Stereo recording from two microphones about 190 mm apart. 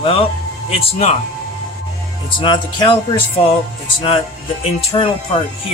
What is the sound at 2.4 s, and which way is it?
Music, 25° left (ahead or behind).